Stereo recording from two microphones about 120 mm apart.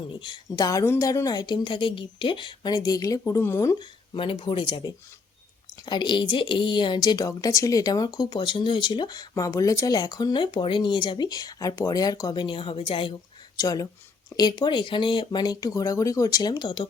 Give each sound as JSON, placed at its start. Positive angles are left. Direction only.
{"t": 0.2, "sound": "speech", "side_deg": 35}
{"t": 3.8, "sound": "speech", "side_deg": 45}
{"t": 5.8, "sound": "speech", "side_deg": 40}
{"t": 9.3, "sound": "speech", "side_deg": 25}
{"t": 13.6, "sound": "speech", "side_deg": 30}